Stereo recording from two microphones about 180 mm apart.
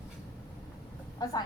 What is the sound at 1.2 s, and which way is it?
Speech, 20° left (ahead or behind).